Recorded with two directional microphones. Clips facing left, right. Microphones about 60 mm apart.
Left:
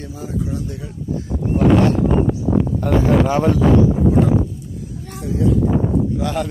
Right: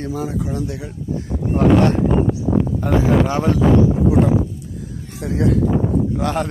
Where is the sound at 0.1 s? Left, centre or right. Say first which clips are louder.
Left 1 dB; right.